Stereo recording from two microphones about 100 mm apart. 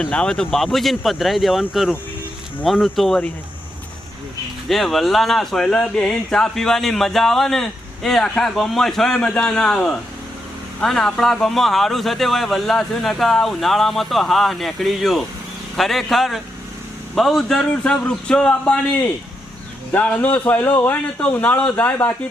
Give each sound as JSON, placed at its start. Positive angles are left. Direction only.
{"t": 0.0, "sound": "speech", "side_deg": 10}
{"t": 4.7, "sound": "a man's voice", "side_deg": 0}
{"t": 19.9, "sound": "a man's voice", "side_deg": 15}